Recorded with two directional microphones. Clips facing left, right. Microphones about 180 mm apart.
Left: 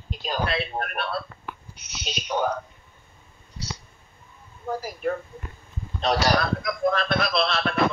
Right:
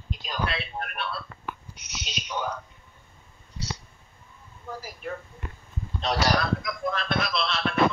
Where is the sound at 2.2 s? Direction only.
60° left (ahead or behind).